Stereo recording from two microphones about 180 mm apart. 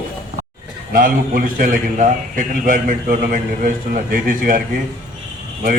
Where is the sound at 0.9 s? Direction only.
50° right (ahead or behind).